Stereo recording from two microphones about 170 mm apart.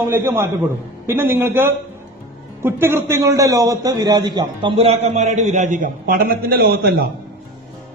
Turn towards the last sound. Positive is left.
turn(degrees=-65)  # may be behind; listen again after turning